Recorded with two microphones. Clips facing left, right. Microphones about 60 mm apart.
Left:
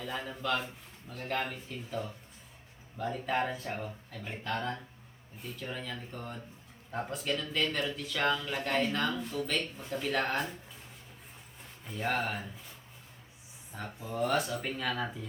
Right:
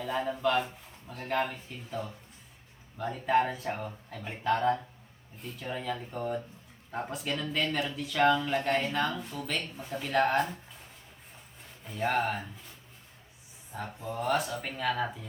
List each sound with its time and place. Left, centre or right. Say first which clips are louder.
0.0 s a man's voice: right 7 dB; centre
4.5 s speech: right 8 dB; right
5.4 s speech: even; centre
5.6 s speech: right 6 dB; centre
11.9 s speech: right 4 dB; centre
13.7 s speech: even; centre